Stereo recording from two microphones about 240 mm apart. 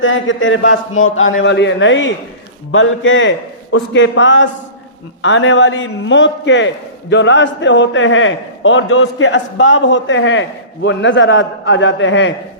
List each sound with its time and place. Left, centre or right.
0.0 s a man's voice: left
1.3 s a man's voice: left